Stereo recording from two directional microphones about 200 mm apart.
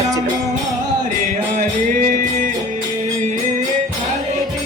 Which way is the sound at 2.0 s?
40° right (ahead or behind).